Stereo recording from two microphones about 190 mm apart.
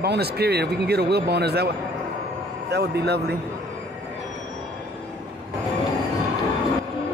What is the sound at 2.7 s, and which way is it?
Speech, 60° right (ahead or behind).